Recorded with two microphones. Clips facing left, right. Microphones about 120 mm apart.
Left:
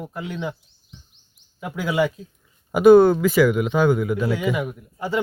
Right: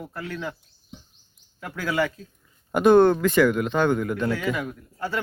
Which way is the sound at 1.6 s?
15° left (ahead or behind).